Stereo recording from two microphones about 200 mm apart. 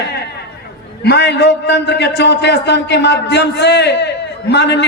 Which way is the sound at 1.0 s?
55° left (ahead or behind).